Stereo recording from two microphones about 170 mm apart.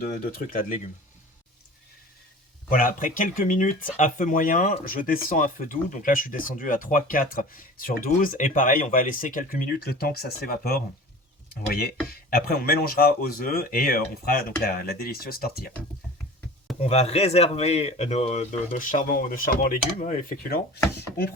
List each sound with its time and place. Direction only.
0.0 s speech: 55° left (ahead or behind)
2.6 s speech: 55° left (ahead or behind)
12.1 s speech: 60° left (ahead or behind)
16.8 s a man's voice: 40° left (ahead or behind); by 20.6 s 55° left (ahead or behind)